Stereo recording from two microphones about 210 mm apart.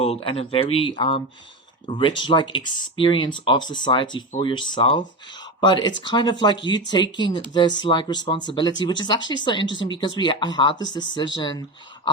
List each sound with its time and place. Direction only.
0.0 s speech: 25° left (ahead or behind)